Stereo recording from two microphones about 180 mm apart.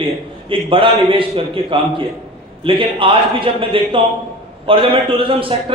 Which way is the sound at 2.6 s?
30° right (ahead or behind).